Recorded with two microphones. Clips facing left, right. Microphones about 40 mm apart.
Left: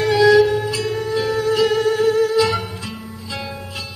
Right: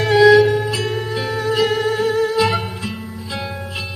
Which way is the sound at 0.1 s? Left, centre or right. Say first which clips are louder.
Right 3 dB; centre.